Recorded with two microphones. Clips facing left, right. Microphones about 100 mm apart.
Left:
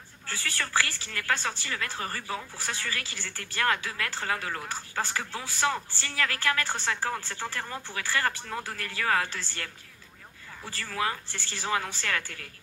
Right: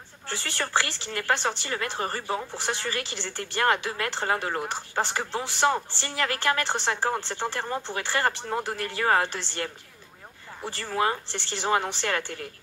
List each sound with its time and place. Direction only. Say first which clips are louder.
0.3 s speech: right 3 dB; 20° right (ahead or behind)